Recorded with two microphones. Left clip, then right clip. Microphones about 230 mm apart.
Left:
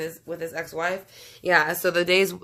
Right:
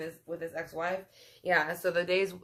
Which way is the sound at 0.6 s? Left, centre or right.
Left.